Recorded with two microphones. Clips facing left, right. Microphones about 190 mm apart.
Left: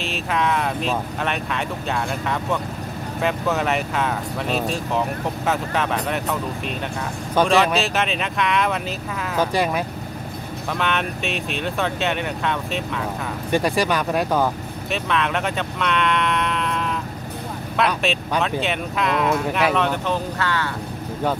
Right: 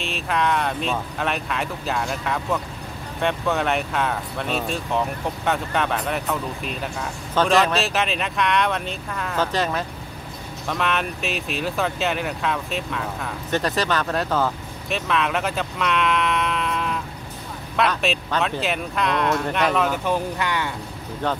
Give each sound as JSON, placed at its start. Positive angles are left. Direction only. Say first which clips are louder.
{"t": 0.0, "sound": "speech", "louder": "left 1 dB", "side_deg": 0}
{"t": 7.4, "sound": "speech", "louder": "even", "side_deg": 0}
{"t": 10.7, "sound": "speech", "louder": "even", "side_deg": 0}
{"t": 13.5, "sound": "speech", "louder": "left 3 dB", "side_deg": 10}
{"t": 14.9, "sound": "speech", "louder": "even", "side_deg": 0}
{"t": 20.3, "sound": "speech", "louder": "left 1 dB", "side_deg": -15}